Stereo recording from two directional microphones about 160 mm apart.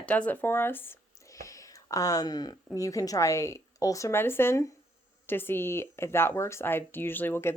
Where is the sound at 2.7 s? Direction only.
20° left (ahead or behind).